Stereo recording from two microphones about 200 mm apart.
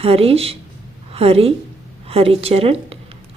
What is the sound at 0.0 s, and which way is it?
A woman's voice, 30° right (ahead or behind).